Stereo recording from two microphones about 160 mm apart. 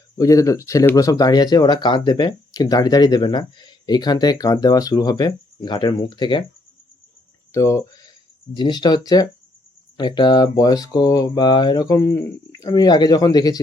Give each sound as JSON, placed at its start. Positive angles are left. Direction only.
{"t": 0.2, "sound": "speech", "side_deg": 20}
{"t": 7.5, "sound": "speech", "side_deg": 15}